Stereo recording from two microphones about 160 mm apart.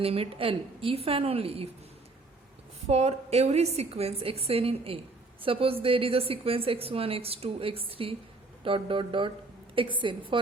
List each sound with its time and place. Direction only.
0.0 s a woman's voice: 35° right (ahead or behind)
2.8 s a woman's voice: 40° right (ahead or behind)